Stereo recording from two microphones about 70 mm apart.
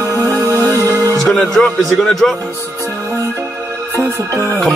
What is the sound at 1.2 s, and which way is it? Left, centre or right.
A man's voice, centre.